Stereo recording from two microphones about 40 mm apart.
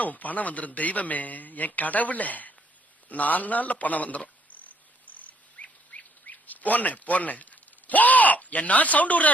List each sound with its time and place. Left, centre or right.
0.0 s a man's voice: left
3.1 s cricket: left
5.9 s speech: left